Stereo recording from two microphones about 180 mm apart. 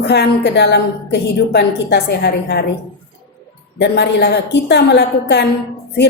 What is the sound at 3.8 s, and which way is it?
A woman's voice, 70° left (ahead or behind).